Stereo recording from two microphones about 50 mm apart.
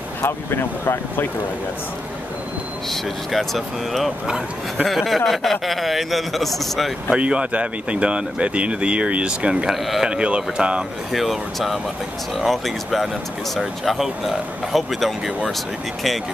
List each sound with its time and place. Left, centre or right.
0.2 s speech: left
2.9 s speech: centre
7.1 s speech: right
9.7 s speech: centre
10.0 s speech: centre
11.1 s speech: centre